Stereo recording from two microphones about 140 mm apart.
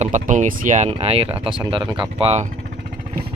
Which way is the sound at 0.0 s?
60° right (ahead or behind).